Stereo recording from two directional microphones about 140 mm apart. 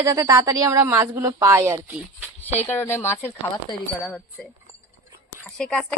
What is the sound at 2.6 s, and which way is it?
Speech, 15° left (ahead or behind).